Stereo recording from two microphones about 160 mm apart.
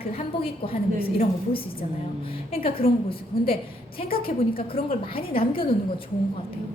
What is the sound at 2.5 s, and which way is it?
Speech, 35° left (ahead or behind).